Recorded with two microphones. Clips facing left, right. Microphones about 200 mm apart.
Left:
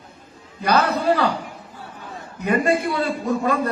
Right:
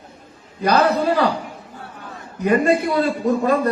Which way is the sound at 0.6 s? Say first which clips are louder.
Right 3 dB; 35° right (ahead or behind).